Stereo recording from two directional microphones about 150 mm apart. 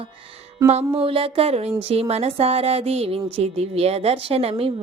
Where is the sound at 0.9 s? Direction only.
40° right (ahead or behind).